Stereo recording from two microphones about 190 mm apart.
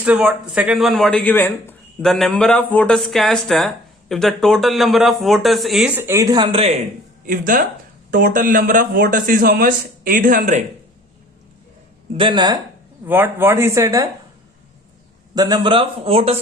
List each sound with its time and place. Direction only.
0.0 s speech: 5° right (ahead or behind); by 6.7 s 30° right (ahead or behind)
7.3 s a man's voice: 45° right (ahead or behind)
12.1 s speech: 25° right (ahead or behind)
13.1 s speech: 10° right (ahead or behind)
15.4 s speech: 20° right (ahead or behind)